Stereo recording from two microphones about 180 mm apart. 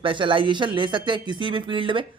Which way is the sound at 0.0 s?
30° right (ahead or behind).